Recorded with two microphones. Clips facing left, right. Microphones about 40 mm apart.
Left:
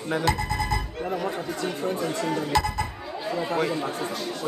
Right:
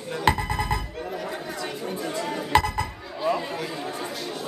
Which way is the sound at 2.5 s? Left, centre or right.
Right.